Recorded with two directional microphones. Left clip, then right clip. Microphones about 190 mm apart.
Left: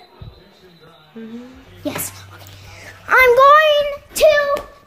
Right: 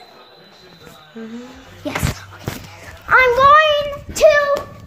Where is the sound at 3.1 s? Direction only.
35° left (ahead or behind).